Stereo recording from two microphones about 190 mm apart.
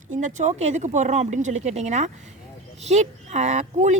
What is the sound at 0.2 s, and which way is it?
A woman's voice, 40° right (ahead or behind).